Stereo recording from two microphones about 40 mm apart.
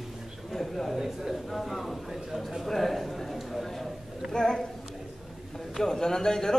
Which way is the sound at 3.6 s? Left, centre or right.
Centre.